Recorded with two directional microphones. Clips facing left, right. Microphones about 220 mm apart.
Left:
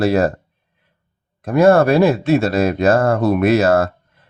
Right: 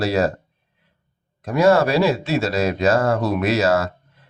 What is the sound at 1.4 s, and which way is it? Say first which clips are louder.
A man's voice: left 4 dB; 55° left (ahead or behind).